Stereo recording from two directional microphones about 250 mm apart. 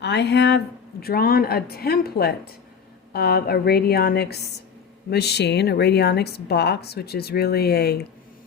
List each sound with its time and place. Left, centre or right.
0.0 s a woman's voice: left